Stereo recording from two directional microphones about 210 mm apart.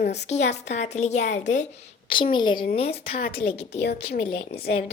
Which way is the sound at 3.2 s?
50° left (ahead or behind).